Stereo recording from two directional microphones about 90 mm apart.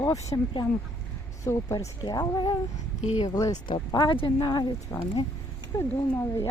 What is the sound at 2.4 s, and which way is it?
Speech, 55° left (ahead or behind).